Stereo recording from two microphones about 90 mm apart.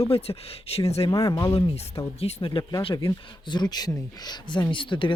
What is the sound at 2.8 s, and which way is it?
Speech, 80° left.